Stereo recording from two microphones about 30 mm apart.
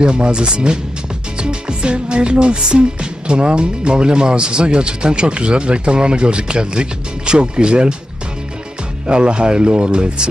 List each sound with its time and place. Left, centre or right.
0.0 s music: right
9.0 s music: right